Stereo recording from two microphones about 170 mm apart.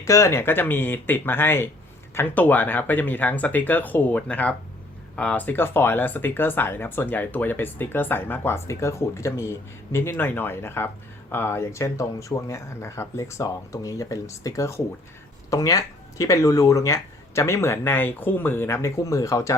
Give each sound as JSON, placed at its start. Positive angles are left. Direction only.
{"t": 0.0, "sound": "speech", "side_deg": 20}